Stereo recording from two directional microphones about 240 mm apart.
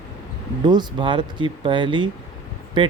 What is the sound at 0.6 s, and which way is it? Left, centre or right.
Speech, centre.